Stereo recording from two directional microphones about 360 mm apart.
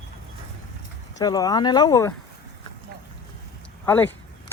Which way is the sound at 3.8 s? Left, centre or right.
Centre.